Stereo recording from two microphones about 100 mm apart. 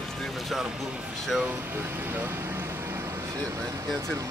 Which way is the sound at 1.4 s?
20° right (ahead or behind).